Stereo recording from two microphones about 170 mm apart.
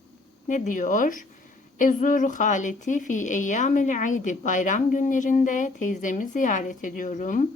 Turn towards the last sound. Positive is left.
turn(degrees=50)  # may be behind; listen again after turning